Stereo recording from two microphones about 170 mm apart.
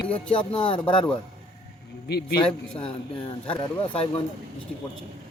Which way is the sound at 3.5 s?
30° left (ahead or behind).